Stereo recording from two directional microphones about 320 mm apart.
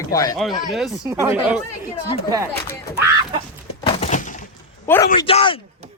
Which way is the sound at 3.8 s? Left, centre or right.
Left.